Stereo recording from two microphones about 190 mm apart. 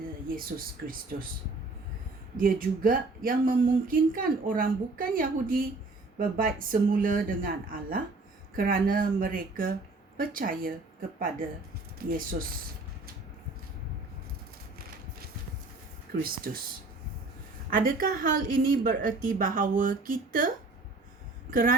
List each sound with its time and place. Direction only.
1.1 s speech: 50° right (ahead or behind)
2.4 s speech: 50° right (ahead or behind)
12.1 s speech: 50° right (ahead or behind)
16.1 s speech: 50° right (ahead or behind)
17.7 s speech: 45° right (ahead or behind)
21.5 s speech: 45° right (ahead or behind)